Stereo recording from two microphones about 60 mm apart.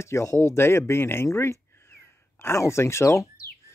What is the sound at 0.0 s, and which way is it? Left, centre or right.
Speech, left.